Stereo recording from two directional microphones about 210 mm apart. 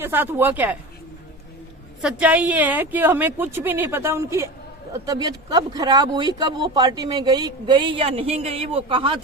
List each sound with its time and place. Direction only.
0.0 s speech: 10° right (ahead or behind)
2.0 s speech: 5° right (ahead or behind); by 9.1 s 25° right (ahead or behind)